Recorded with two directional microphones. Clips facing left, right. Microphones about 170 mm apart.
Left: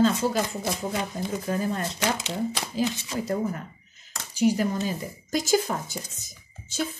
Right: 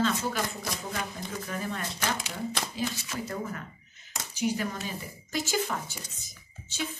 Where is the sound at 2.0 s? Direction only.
25° left (ahead or behind).